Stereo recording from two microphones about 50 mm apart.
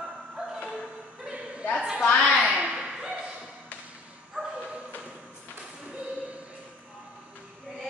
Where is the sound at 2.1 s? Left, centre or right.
Left.